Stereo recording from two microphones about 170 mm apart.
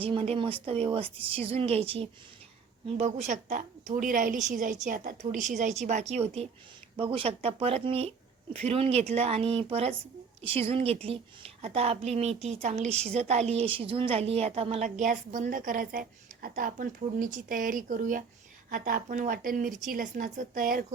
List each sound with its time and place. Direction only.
0.0 s a woman's voice: 35° right (ahead or behind); by 20.8 s 55° right (ahead or behind)